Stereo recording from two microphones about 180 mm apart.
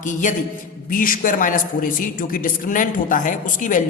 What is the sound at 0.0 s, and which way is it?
Speech, 45° left (ahead or behind).